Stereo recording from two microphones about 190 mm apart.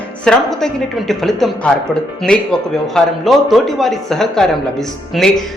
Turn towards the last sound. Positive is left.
turn(degrees=0)  # may be behind; listen again after turning